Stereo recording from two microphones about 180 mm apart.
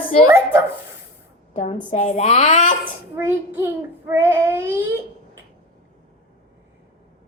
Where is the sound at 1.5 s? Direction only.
40° left (ahead or behind).